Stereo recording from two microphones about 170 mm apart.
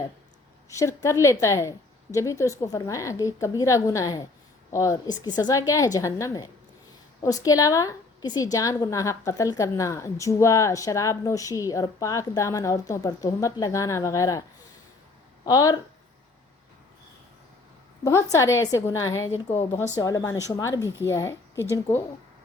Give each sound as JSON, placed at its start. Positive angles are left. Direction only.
{"t": 0.7, "sound": "a woman's voice", "side_deg": 20}
{"t": 15.4, "sound": "a woman's voice", "side_deg": 20}
{"t": 18.0, "sound": "a woman's voice", "side_deg": 15}